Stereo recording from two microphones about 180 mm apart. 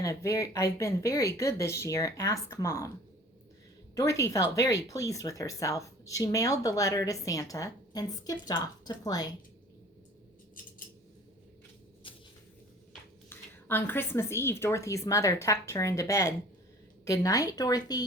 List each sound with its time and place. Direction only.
0.0 s speech: 20° left (ahead or behind)
3.9 s speech: 15° left (ahead or behind)
12.0 s a sound: 30° left (ahead or behind)
13.3 s speech: 10° left (ahead or behind)